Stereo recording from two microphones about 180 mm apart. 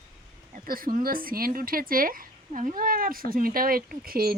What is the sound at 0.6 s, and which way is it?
Speech, 50° right (ahead or behind).